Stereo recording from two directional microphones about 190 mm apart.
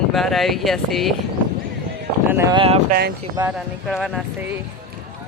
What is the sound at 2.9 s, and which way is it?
Speech, 55° right (ahead or behind).